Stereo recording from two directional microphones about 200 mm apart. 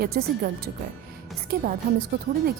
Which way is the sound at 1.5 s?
45° right (ahead or behind).